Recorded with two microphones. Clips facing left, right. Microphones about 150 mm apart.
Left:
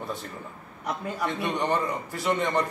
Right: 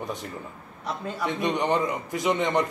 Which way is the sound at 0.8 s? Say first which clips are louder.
Even; 15° left (ahead or behind).